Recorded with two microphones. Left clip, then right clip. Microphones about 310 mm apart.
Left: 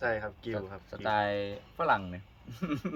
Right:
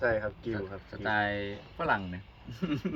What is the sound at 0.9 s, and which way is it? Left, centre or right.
Speech, left.